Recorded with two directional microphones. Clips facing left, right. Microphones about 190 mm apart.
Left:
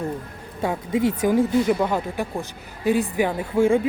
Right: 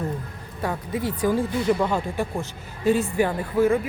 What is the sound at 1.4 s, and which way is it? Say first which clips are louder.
Speech: left 3 dB; 10° left (ahead or behind).